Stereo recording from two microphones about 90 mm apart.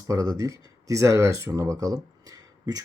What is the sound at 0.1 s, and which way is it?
Speech, 40° right (ahead or behind).